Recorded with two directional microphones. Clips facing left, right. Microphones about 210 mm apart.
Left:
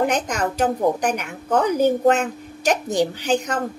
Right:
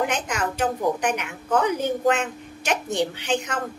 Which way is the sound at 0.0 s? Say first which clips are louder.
Left 4 dB; 40° left (ahead or behind).